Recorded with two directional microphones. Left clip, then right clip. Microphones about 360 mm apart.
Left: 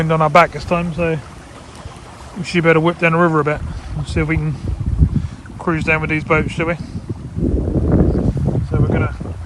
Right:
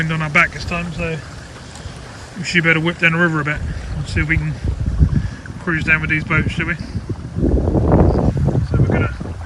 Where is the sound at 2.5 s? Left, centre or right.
Centre.